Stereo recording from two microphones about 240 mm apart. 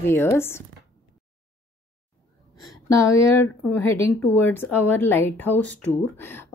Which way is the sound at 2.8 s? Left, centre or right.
Centre.